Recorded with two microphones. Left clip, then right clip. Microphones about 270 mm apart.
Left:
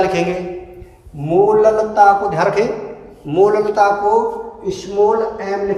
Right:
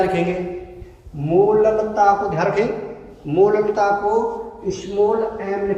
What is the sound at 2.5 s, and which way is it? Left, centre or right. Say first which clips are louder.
Speech: left 3 dB; centre.